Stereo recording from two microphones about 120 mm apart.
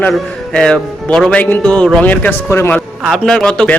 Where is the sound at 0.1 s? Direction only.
5° left (ahead or behind).